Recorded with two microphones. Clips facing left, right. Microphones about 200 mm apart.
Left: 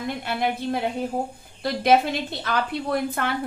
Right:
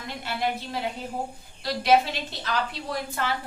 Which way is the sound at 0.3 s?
55° left (ahead or behind).